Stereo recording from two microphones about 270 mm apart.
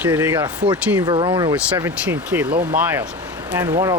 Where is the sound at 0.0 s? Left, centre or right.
Centre.